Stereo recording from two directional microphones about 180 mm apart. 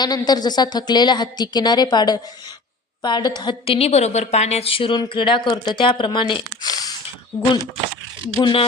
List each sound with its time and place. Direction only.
0.0 s a woman's voice: 20° left (ahead or behind)
8.4 s a woman's voice: 25° left (ahead or behind)